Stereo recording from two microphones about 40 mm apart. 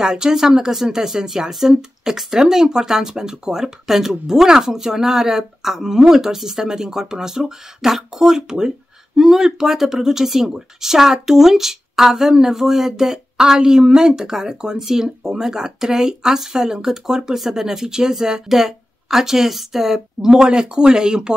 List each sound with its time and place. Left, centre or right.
0.0 s speech: centre